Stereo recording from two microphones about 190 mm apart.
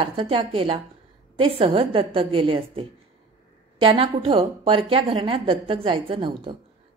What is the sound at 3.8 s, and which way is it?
A woman's voice, 30° right (ahead or behind).